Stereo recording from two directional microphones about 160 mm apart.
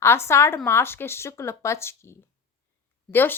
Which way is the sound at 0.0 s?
15° left (ahead or behind).